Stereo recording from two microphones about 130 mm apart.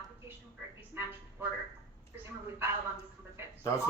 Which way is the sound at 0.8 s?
15° right (ahead or behind).